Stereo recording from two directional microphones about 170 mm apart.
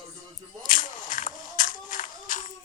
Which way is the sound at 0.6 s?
50° left (ahead or behind).